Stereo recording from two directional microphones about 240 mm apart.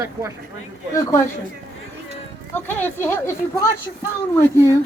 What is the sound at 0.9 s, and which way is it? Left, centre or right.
Speech, centre.